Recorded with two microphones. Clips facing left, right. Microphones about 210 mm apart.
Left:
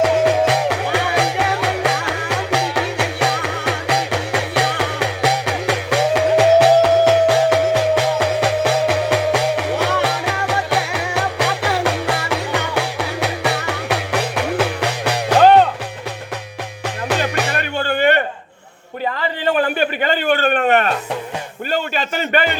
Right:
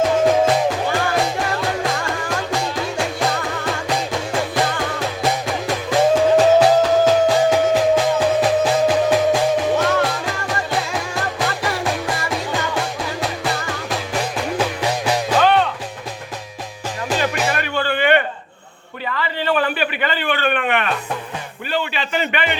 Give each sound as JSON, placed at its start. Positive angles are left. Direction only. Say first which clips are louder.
{"t": 0.0, "sound": "music", "louder": "even", "side_deg": 70}
{"t": 16.8, "sound": "music", "louder": "left 1 dB", "side_deg": 65}
{"t": 17.5, "sound": "music", "louder": "even", "side_deg": 45}
{"t": 19.1, "sound": "a sound", "louder": "left 1 dB", "side_deg": 45}